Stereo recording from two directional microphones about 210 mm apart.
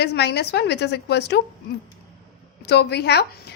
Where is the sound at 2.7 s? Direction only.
50° left (ahead or behind).